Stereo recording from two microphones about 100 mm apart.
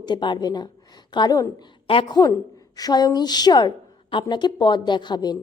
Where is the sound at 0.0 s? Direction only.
50° left (ahead or behind).